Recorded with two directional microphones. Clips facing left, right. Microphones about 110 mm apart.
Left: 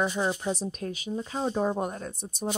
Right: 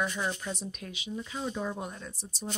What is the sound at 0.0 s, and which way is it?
Speech, 30° left (ahead or behind).